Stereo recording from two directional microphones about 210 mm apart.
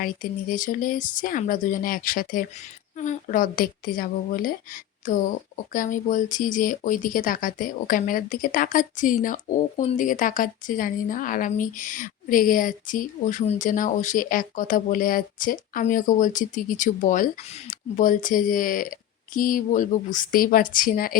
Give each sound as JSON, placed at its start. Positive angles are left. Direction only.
{"t": 0.0, "sound": "speech", "side_deg": 40}